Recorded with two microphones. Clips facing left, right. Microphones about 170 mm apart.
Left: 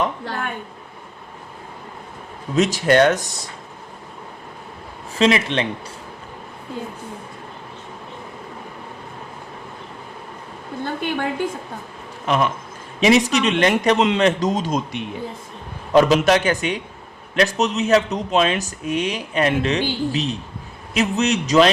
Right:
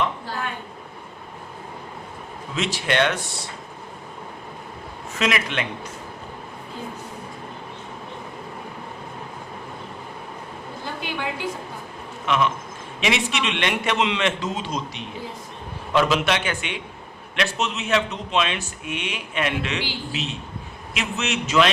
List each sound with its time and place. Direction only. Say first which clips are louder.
0.3 s a woman's voice: left 2 dB; 55° left (ahead or behind)
2.6 s speech: left 7 dB; 45° left (ahead or behind)
5.1 s speech: left 7 dB; 30° left (ahead or behind)
10.8 s a sound: left 6 dB; 55° left (ahead or behind)
12.2 s speech: left 2 dB; 40° left (ahead or behind)